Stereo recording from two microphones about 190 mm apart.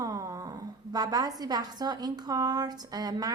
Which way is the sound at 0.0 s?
20° right (ahead or behind).